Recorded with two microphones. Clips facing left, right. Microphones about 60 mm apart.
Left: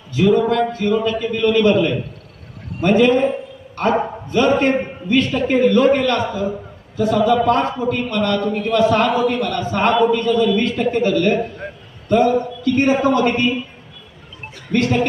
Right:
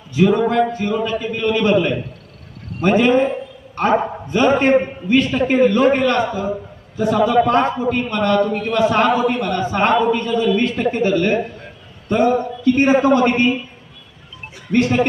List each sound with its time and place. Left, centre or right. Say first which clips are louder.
0.1 s a man's voice: even; right
8.5 s a man's voice: left 1 dB; centre